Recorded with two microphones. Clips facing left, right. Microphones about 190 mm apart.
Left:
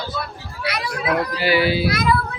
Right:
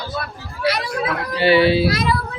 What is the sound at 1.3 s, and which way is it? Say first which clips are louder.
Speech: right 8 dB; 30° right (ahead or behind).